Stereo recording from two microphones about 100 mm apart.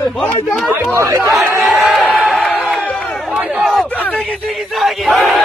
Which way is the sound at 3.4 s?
Centre (ahead or behind).